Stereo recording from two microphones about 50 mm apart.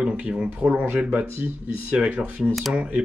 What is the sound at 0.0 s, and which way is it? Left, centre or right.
Speech, centre.